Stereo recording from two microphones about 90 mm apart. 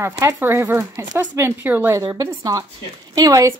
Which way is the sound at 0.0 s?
30° right (ahead or behind).